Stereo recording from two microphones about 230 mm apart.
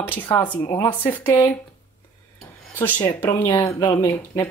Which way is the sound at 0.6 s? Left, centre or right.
Centre.